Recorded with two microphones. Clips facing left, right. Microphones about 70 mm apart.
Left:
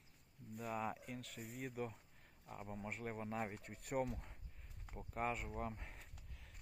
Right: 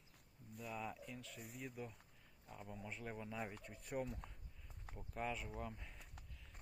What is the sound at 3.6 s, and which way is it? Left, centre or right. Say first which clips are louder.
Speech: left 4 dB; left.